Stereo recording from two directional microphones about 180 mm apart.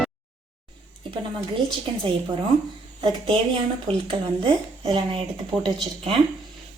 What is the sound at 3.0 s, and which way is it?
Speech, 30° right (ahead or behind).